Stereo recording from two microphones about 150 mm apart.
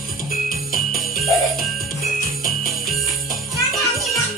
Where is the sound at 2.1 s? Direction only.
70° left (ahead or behind).